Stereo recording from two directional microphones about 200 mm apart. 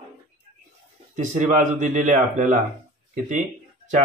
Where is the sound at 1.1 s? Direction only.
35° right (ahead or behind).